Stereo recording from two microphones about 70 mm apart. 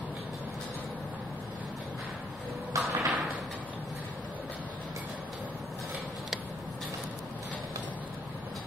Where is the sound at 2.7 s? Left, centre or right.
Right.